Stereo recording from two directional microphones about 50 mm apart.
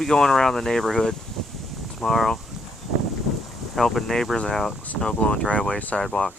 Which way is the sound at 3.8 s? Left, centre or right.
Centre.